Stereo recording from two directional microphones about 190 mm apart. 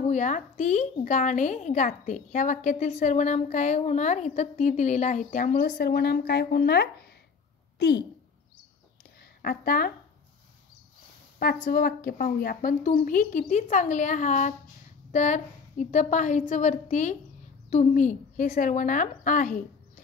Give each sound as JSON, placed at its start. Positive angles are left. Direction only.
{"t": 0.1, "sound": "a woman's voice", "side_deg": 40}
{"t": 5.7, "sound": "speech", "side_deg": 55}
{"t": 9.4, "sound": "a woman's voice", "side_deg": 50}
{"t": 11.3, "sound": "a woman's voice", "side_deg": 50}